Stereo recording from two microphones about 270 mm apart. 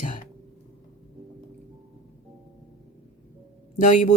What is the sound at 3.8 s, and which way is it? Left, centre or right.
Speech, left.